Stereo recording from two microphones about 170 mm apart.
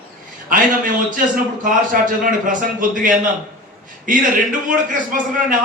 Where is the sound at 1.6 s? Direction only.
50° right (ahead or behind).